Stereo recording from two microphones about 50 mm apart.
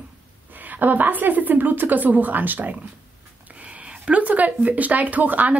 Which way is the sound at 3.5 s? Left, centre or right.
Right.